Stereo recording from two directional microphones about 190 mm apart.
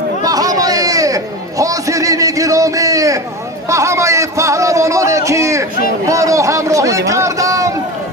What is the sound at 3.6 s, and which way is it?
Speech, 15° right (ahead or behind).